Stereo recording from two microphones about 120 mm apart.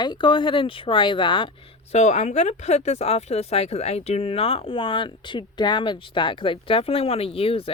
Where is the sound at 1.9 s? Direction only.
70° left (ahead or behind).